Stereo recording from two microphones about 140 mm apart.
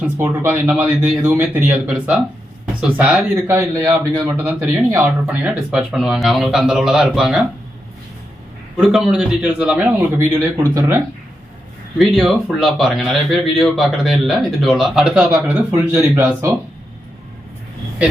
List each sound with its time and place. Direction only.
0.2 s a man's voice: 15° right (ahead or behind)
4.4 s speech: 15° right (ahead or behind)
8.8 s a man's voice: centre (ahead or behind)
11.9 s speech: centre (ahead or behind); by 16.6 s 15° right (ahead or behind)